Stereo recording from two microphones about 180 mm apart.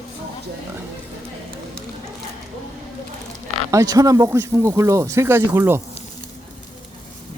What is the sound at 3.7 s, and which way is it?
Speech, 20° right (ahead or behind).